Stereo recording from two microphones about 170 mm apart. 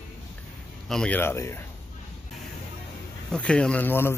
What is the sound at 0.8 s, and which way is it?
Speech, 5° left (ahead or behind).